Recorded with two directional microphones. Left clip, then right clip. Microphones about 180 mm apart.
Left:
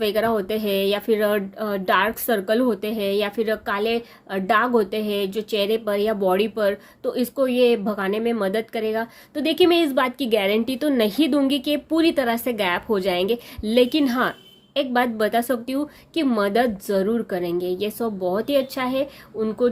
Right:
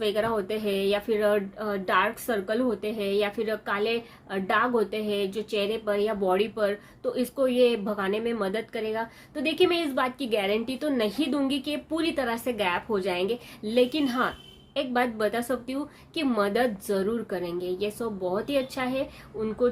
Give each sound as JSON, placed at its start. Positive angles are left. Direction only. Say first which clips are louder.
{"t": 0.0, "sound": "speech", "louder": "left 5 dB", "side_deg": 40}